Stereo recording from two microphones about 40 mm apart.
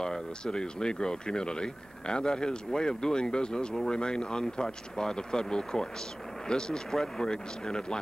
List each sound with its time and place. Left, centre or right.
0.0 s speech: centre